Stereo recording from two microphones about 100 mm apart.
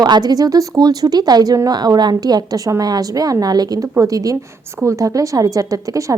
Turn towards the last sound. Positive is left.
turn(degrees=-35)  # may be behind; listen again after turning